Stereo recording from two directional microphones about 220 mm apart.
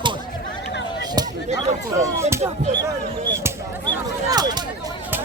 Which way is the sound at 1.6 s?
30° right (ahead or behind).